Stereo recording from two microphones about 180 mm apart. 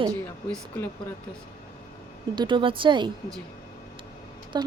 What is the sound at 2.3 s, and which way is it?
Speech, 25° right (ahead or behind).